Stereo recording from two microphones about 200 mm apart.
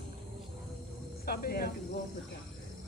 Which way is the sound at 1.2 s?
50° left (ahead or behind).